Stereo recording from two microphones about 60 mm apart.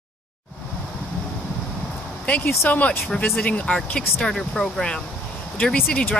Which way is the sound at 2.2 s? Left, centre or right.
Left.